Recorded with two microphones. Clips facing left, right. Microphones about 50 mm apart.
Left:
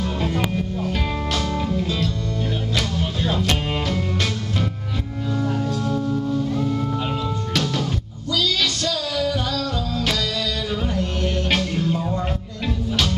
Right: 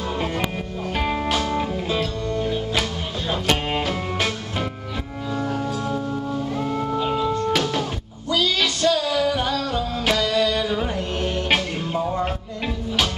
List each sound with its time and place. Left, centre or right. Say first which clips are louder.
1.3 s music: right 1 dB; centre
3.3 s music: right 3 dB; centre
6.5 s music: left 1 dB; centre
8.3 s female singing: right 1 dB; right
10.0 s music: right 7 dB; right